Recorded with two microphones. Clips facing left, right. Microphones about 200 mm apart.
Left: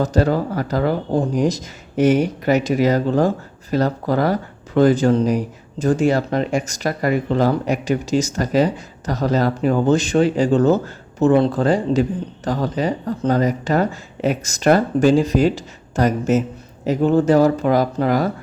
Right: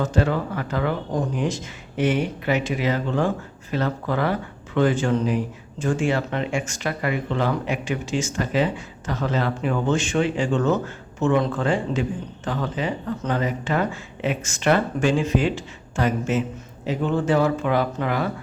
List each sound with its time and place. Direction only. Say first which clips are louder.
0.0 s speech: left 5 dB; 40° left (ahead or behind)